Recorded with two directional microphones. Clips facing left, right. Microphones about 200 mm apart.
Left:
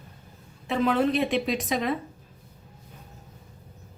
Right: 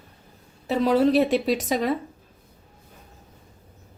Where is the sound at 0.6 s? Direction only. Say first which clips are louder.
Right 4 dB; 40° right (ahead or behind).